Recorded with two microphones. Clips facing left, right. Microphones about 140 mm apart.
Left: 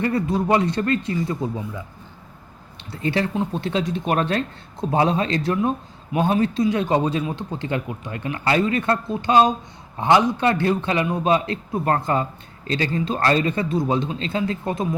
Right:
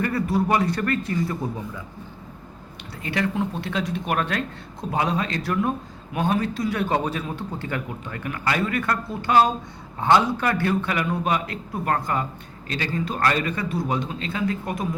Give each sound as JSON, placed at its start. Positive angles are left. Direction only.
{"t": 0.0, "sound": "a man's voice", "side_deg": 20}
{"t": 3.0, "sound": "a man's voice", "side_deg": 30}